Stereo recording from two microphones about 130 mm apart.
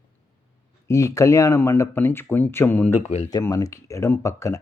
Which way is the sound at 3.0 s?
55° left (ahead or behind).